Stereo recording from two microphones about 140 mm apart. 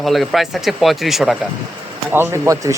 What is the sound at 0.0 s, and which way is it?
A man's voice, centre (ahead or behind).